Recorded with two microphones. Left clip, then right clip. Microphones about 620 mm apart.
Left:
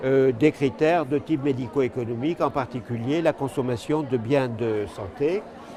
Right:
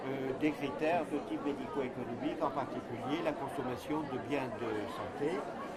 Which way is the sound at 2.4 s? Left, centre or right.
Left.